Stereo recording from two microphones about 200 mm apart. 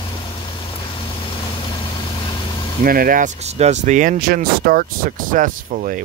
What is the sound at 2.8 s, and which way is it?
Speech, 45° right (ahead or behind).